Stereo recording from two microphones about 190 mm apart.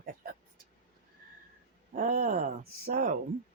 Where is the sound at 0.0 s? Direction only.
50° right (ahead or behind).